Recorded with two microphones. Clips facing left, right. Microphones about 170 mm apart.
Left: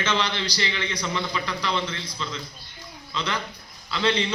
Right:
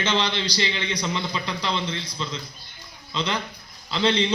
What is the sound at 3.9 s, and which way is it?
Speech, 30° right (ahead or behind).